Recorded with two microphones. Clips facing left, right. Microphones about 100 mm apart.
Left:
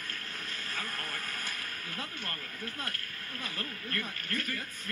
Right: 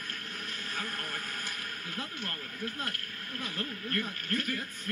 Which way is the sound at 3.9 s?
30° right (ahead or behind).